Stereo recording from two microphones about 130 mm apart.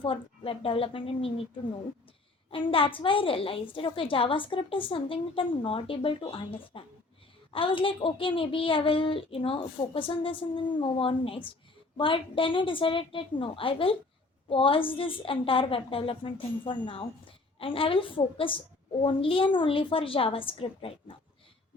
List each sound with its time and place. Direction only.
0.0 s a woman's voice: 45° left (ahead or behind)
2.5 s a woman's voice: 45° left (ahead or behind)